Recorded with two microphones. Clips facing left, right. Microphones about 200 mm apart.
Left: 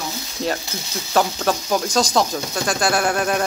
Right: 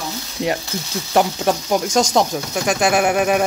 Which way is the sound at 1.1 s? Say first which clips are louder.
Right 2 dB; 20° right (ahead or behind).